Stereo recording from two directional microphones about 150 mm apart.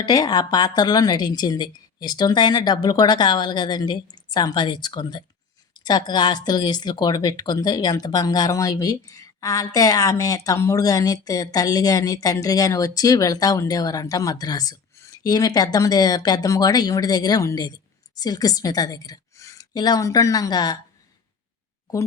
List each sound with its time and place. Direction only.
0.0 s a woman's voice: 25° left (ahead or behind)